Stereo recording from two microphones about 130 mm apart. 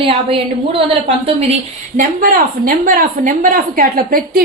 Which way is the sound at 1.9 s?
90° right.